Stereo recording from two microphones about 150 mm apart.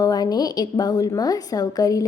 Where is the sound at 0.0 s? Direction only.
25° left (ahead or behind).